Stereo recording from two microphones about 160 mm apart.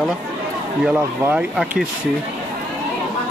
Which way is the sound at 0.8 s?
10° right (ahead or behind).